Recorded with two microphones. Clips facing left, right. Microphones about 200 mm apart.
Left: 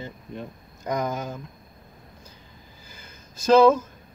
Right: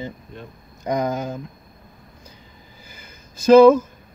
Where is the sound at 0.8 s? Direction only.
15° right (ahead or behind).